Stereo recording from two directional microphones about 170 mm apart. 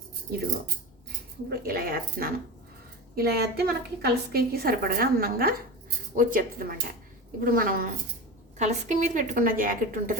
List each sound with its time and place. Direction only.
1.5 s a woman's voice: 60° right (ahead or behind)
8.5 s a woman's voice: 45° right (ahead or behind)